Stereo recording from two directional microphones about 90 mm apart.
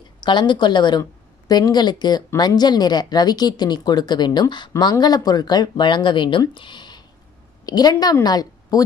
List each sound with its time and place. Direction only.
0.2 s speech: 60° left (ahead or behind)
5.0 s speech: 45° left (ahead or behind); by 6.4 s 65° left (ahead or behind)
6.5 s a sound: 60° left (ahead or behind)
7.6 s a woman's voice: 45° left (ahead or behind)